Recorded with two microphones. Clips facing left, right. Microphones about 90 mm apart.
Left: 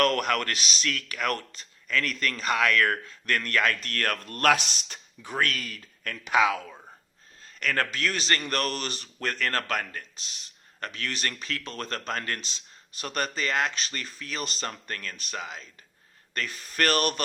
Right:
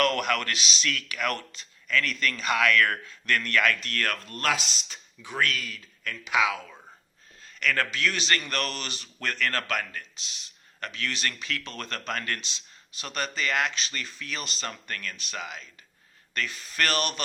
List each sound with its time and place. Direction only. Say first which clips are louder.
0.0 s speech: left 1 dB; 40° left (ahead or behind); by 5.3 s 60° left (ahead or behind)
5.3 s speech: even; 45° left (ahead or behind)
7.6 s speech: right 1 dB; 40° left (ahead or behind)